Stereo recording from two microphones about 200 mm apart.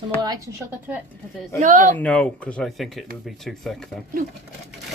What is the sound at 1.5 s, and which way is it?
Speech, 40° right (ahead or behind).